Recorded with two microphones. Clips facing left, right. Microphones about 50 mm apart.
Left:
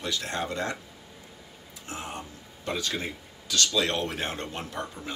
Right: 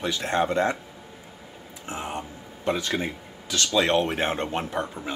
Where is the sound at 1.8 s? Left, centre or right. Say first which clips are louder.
Right 5 dB; right.